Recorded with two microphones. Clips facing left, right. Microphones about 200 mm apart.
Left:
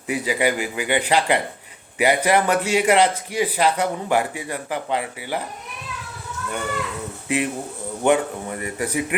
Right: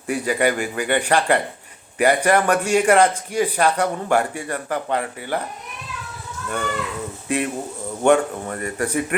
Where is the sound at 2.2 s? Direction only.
10° left (ahead or behind).